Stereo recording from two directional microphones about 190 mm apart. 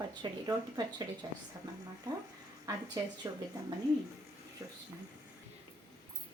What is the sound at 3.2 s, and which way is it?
Speech, 20° right (ahead or behind).